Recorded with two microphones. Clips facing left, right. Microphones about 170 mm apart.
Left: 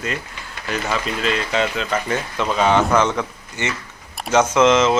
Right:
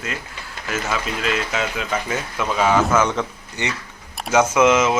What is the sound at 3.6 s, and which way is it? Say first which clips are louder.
Speech: left 1 dB; 20° right (ahead or behind).